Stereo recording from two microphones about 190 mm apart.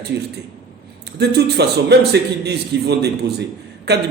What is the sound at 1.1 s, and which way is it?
A man's voice, 60° right (ahead or behind).